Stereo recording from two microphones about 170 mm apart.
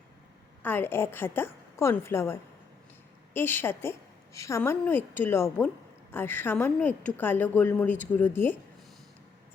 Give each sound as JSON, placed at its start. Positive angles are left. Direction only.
{"t": 0.6, "sound": "a woman's voice", "side_deg": 10}